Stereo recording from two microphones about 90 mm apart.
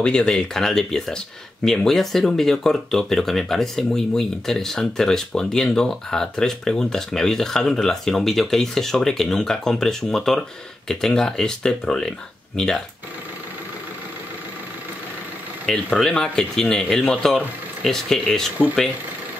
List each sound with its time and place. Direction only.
0.0 s speech: 10° left (ahead or behind)
15.6 s speech: 10° left (ahead or behind)